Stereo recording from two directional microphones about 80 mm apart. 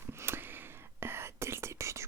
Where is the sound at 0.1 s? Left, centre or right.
Right.